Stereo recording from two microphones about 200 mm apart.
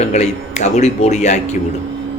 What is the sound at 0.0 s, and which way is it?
A man's voice, 35° left (ahead or behind).